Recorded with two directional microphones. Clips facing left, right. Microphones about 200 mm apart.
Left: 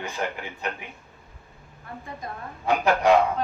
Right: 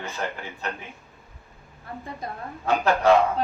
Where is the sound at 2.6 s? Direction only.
15° left (ahead or behind).